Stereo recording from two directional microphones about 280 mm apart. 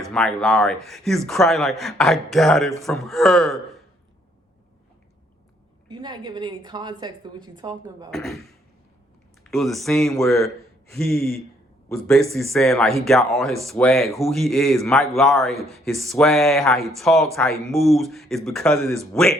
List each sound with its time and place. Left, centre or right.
0.0 s a man's voice: centre
5.9 s a woman's voice: centre
8.1 s a man's voice: centre